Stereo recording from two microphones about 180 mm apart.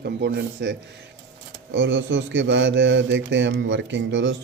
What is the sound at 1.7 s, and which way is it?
Speech, 85° right.